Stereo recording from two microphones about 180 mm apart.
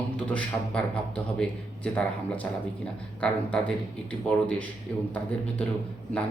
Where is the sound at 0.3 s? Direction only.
5° left (ahead or behind).